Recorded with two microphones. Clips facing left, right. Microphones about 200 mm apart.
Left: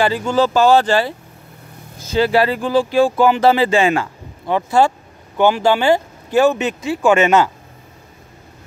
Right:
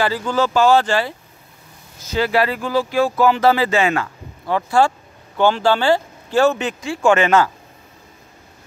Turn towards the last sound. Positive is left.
turn(degrees=20)  # may be behind; listen again after turning